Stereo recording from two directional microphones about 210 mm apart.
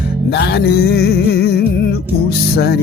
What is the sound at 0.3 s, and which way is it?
Music, 50° left (ahead or behind).